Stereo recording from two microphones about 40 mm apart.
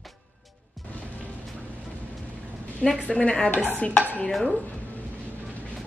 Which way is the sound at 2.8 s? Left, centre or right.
Centre.